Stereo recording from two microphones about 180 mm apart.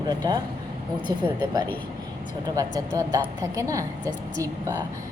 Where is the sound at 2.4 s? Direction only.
20° right (ahead or behind).